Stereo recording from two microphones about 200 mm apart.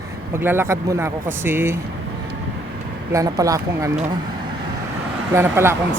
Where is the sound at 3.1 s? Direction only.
15° right (ahead or behind).